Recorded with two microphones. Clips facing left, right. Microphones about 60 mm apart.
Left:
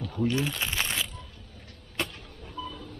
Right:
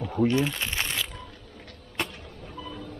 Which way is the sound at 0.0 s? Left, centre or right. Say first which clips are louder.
Right 4 dB; right.